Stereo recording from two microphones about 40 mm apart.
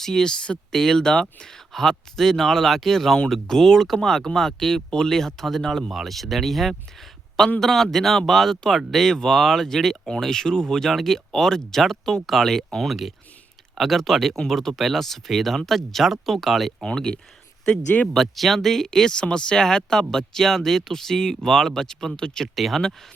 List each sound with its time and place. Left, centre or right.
0.0 s speech: centre
0.3 s speech: left
0.7 s speech: centre
12.9 s speech: centre
16.8 s speech: centre
18.1 s speech: centre
22.5 s speech: centre